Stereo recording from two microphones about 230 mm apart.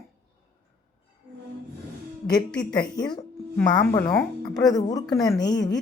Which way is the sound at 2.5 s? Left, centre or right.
Centre.